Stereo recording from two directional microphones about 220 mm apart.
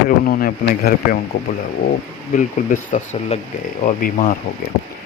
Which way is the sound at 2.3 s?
35° left (ahead or behind).